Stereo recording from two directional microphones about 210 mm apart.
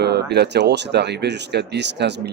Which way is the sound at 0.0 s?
50° right (ahead or behind).